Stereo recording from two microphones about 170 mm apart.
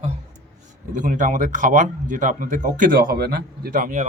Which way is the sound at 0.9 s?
50° right (ahead or behind).